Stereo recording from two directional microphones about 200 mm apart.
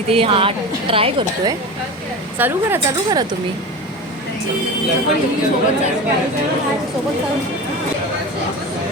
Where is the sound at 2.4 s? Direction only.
10° right (ahead or behind).